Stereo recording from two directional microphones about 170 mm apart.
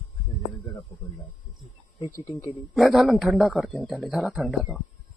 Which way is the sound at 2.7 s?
Centre (ahead or behind).